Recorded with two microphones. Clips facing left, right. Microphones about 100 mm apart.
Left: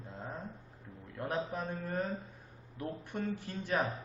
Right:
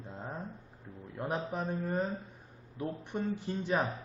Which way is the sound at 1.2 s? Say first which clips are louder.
Right 1 dB; 20° right (ahead or behind).